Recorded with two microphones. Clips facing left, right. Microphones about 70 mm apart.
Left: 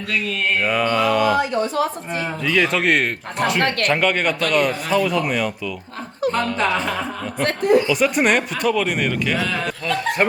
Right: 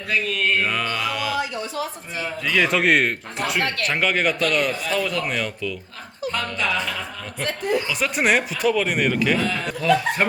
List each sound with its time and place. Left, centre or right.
0.1 s speech: centre
1.4 s a sound: left
2.4 s speech: centre
3.6 s speech: left
3.8 s speech: centre
6.6 s speech: left
7.9 s speech: centre